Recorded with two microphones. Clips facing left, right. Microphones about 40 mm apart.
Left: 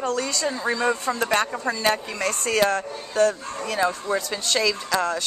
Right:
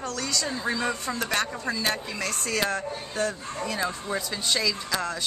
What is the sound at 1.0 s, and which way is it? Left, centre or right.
A woman's voice, left.